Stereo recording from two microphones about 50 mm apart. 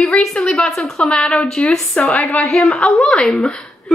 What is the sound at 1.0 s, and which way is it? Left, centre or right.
A woman's voice, left.